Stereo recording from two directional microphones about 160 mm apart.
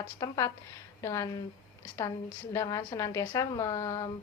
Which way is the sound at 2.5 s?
20° left (ahead or behind).